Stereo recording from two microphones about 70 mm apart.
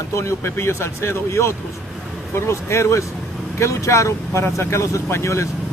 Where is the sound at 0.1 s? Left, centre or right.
Left.